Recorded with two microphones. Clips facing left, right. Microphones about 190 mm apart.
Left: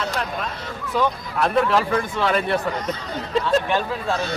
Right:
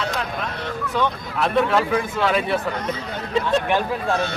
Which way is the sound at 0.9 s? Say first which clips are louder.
Left 2 dB; centre (ahead or behind).